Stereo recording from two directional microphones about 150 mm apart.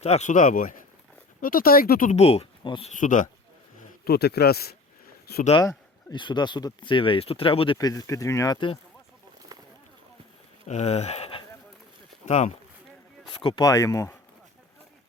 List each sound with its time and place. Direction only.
0.0 s speech: 50° left (ahead or behind); by 2.1 s 70° left (ahead or behind)
2.1 s speech: 45° left (ahead or behind)
2.9 s speech: 60° left (ahead or behind)
4.0 s speech: 90° left
5.6 s speech: 30° left (ahead or behind)
8.5 s speech: 35° left (ahead or behind)
9.5 s a sound: 25° right (ahead or behind)
10.7 s speech: 45° left (ahead or behind)
12.2 s speech: 50° left (ahead or behind)
13.4 s speech: 30° left (ahead or behind)